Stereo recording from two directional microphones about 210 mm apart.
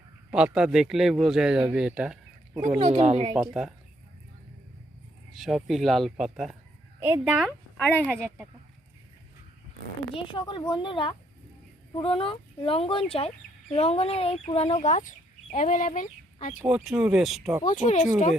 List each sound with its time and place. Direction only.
0.3 s a man's voice: 5° right (ahead or behind)
2.7 s speech: 30° right (ahead or behind)
3.3 s a man's voice: 5° right (ahead or behind)
5.3 s a man's voice: centre (ahead or behind)
7.8 s speech: 10° left (ahead or behind)
8.0 s speech: 5° right (ahead or behind)
10.2 s speech: 20° left (ahead or behind)
16.6 s a man's voice: 5° right (ahead or behind)
17.8 s speech: 35° left (ahead or behind)